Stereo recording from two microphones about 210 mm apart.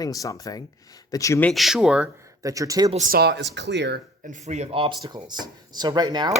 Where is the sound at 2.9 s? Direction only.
40° right (ahead or behind).